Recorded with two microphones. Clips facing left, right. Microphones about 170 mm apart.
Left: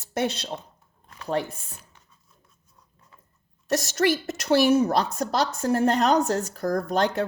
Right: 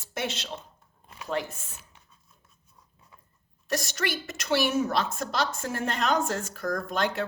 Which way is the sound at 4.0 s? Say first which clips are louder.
Left 9 dB; 50° left (ahead or behind).